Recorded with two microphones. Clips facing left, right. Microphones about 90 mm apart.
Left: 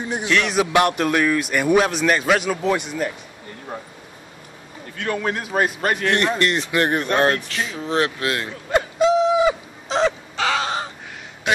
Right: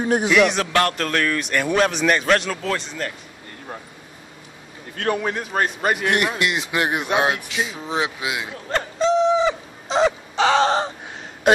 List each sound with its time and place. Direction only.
0.0 s music: 45° right (ahead or behind)
0.3 s a man's voice: 5° right (ahead or behind)
0.6 s speech: 15° left (ahead or behind)
5.2 s a man's voice: centre (ahead or behind)
8.7 s owl: 10° left (ahead or behind)
10.3 s crow: 25° right (ahead or behind)
11.5 s a sound: 45° right (ahead or behind)